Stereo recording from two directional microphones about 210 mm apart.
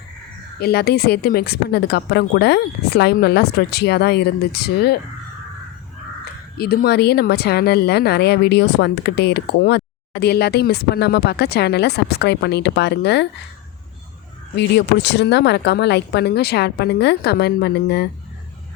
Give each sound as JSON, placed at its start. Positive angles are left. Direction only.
{"t": 0.6, "sound": "a woman's voice", "side_deg": 50}
{"t": 6.6, "sound": "a woman's voice", "side_deg": 50}
{"t": 14.5, "sound": "a woman's voice", "side_deg": 55}